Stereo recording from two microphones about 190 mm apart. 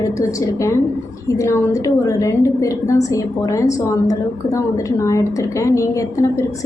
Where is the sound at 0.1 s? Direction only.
15° left (ahead or behind).